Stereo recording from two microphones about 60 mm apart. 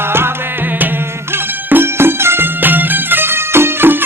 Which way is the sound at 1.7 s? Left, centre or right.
Right.